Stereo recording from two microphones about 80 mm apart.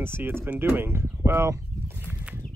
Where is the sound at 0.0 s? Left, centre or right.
Right.